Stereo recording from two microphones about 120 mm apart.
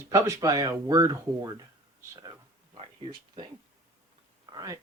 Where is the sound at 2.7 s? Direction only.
40° right (ahead or behind).